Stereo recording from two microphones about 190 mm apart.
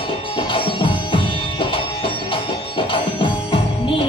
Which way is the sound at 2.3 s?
25° left (ahead or behind).